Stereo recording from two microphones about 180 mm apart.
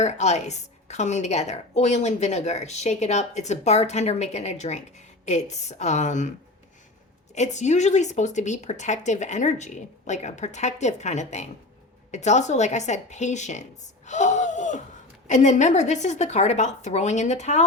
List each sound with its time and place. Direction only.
0.0 s a woman's voice: 40° left (ahead or behind)
7.3 s a woman's voice: 40° left (ahead or behind)